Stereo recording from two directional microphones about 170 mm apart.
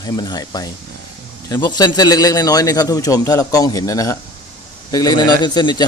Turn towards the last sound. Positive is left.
turn(degrees=25)  # may be behind; listen again after turning